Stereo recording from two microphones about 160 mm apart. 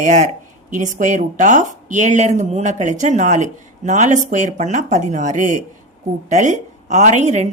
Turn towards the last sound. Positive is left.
turn(degrees=-45)  # may be behind; listen again after turning